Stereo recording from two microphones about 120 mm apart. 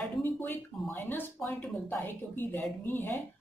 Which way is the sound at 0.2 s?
15° left (ahead or behind).